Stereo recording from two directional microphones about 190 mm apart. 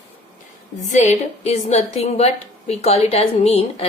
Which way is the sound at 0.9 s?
35° left (ahead or behind).